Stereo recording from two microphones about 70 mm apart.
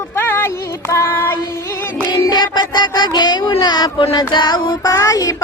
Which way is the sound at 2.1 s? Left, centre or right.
Left.